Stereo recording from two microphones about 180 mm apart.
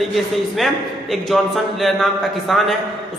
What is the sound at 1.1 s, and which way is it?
Speech, centre (ahead or behind).